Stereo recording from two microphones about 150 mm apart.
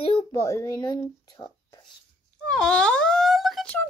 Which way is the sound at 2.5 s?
5° left (ahead or behind).